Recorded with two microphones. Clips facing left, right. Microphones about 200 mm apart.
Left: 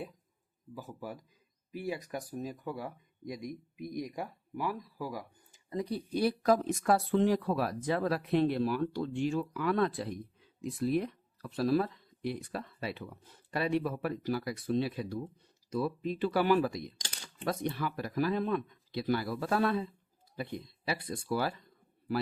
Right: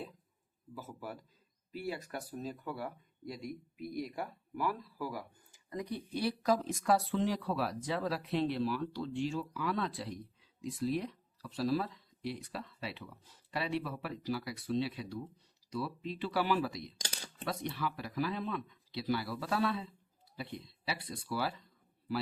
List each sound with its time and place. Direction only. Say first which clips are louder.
0.7 s speech: left 2 dB; 15° left (ahead or behind)
5.7 s speech: left 4 dB; 30° left (ahead or behind)
6.1 s speech: left 4 dB; 50° left (ahead or behind)